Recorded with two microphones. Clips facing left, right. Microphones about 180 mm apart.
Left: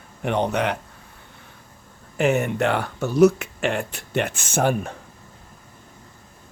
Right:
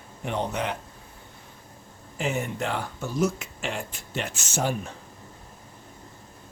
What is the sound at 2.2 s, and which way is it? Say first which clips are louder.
Speech: left 8 dB; 65° left (ahead or behind).